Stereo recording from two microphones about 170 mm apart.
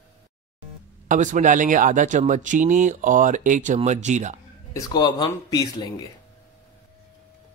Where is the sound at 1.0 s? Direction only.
50° right (ahead or behind).